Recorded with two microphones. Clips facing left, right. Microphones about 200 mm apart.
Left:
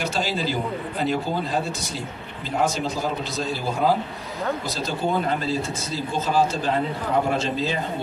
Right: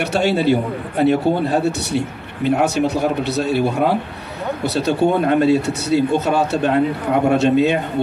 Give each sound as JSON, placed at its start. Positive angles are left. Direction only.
{"t": 0.0, "sound": "a man's voice", "side_deg": -65}